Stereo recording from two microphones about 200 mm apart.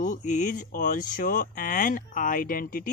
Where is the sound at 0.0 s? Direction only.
40° left (ahead or behind).